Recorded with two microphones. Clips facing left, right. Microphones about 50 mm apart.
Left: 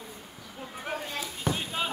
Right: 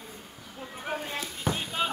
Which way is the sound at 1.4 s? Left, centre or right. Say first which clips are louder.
Right 1 dB; centre.